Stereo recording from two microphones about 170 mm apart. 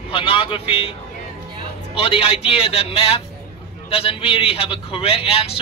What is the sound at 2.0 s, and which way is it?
Speech, 35° left (ahead or behind).